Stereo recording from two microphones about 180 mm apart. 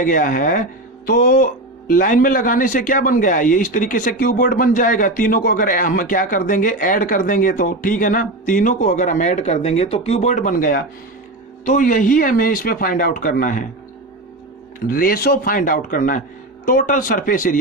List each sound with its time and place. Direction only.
0.0 s speech: 50° left (ahead or behind)
14.8 s speech: 50° left (ahead or behind)